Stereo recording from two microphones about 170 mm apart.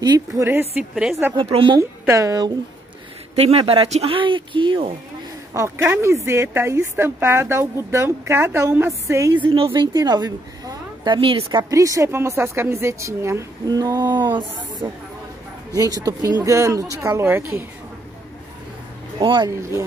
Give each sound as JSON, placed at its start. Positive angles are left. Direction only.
{"t": 0.0, "sound": "a woman's voice", "side_deg": -25}
{"t": 0.5, "sound": "a woman's voice", "side_deg": -10}
{"t": 1.3, "sound": "speech", "side_deg": -35}
{"t": 1.8, "sound": "a woman's voice", "side_deg": -20}
{"t": 3.3, "sound": "speech", "side_deg": -35}
{"t": 5.5, "sound": "a woman's voice", "side_deg": -15}
{"t": 11.7, "sound": "a woman's voice", "side_deg": -20}
{"t": 19.1, "sound": "a woman's voice", "side_deg": -25}